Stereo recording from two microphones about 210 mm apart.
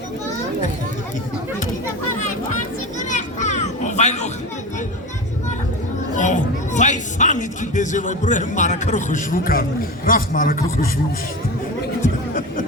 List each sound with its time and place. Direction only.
3.0 s children playing: 35° left (ahead or behind)
6.1 s a man's voice: 35° left (ahead or behind)